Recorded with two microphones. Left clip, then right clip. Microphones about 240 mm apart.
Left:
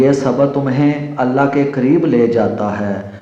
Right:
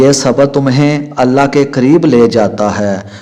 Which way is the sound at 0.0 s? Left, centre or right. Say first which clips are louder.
Right 4 dB; right.